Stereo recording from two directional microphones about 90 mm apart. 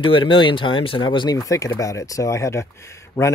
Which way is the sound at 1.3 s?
40° left (ahead or behind).